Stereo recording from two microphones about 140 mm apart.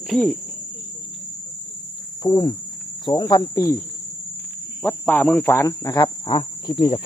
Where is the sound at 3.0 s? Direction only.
30° left (ahead or behind).